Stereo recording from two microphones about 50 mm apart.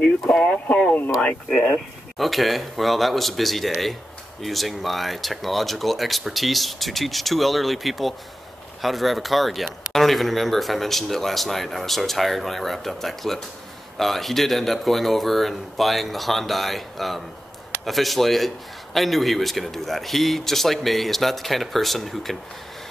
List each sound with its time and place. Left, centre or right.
0.0 s a sound: centre
1.5 s speech: centre
2.1 s speech: centre